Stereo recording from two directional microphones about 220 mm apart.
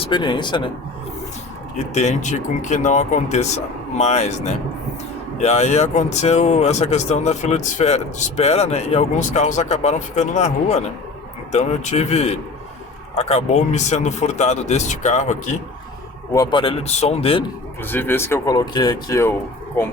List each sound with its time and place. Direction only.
0.1 s speech: 20° left (ahead or behind)
1.9 s speech: 30° left (ahead or behind)
16.3 s speech: 20° left (ahead or behind)
17.8 s speech: 10° left (ahead or behind)